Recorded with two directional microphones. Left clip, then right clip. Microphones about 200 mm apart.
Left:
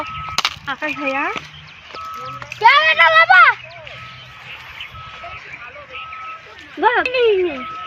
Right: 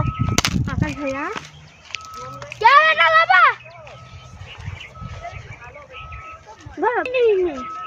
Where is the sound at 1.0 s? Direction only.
40° left (ahead or behind).